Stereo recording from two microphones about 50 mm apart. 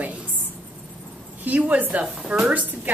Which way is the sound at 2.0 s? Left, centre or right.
Centre.